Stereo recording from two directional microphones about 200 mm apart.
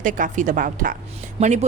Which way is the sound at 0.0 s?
40° right (ahead or behind).